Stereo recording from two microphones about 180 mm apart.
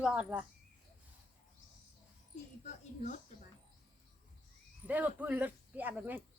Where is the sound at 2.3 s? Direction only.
45° left (ahead or behind).